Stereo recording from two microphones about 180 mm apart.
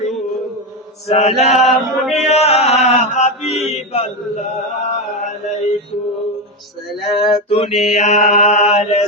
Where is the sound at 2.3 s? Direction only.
35° left (ahead or behind).